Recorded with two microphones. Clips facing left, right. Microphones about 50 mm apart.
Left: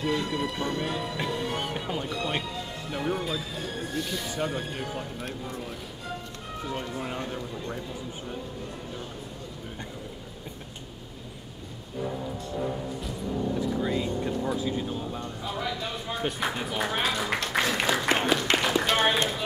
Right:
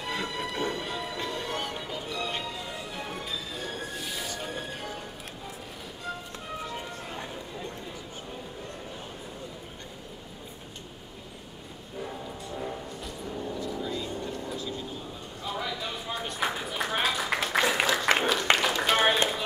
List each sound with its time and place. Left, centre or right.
0.0 s music: centre
0.7 s music: centre
1.7 s music: left
2.0 s music: centre
3.0 s a sound: centre
4.4 s speech: centre
12.0 s music: centre
13.7 s vehicle: left
14.6 s a sound: left
15.4 s a sound: centre
17.8 s applause: centre
18.6 s a sound: centre